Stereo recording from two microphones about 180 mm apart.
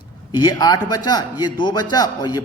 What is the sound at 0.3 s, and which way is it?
A man's voice, 20° left (ahead or behind).